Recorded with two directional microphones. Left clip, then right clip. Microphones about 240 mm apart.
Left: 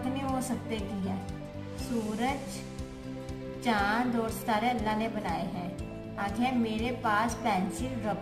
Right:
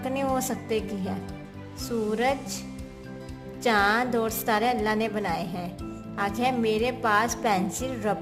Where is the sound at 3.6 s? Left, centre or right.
Right.